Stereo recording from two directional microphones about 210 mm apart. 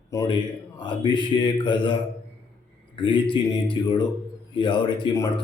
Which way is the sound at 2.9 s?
25° left (ahead or behind).